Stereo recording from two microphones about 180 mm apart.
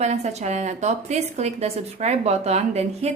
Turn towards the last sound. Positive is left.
turn(degrees=-35)  # may be behind; listen again after turning